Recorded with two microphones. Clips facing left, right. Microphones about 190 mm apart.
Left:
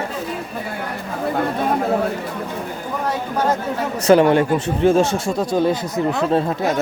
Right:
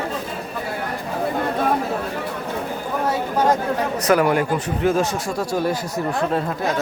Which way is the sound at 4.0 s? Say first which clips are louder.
Left 6 dB; 25° left (ahead or behind).